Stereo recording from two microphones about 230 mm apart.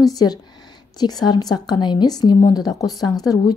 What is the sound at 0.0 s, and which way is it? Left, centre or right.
Speech, centre.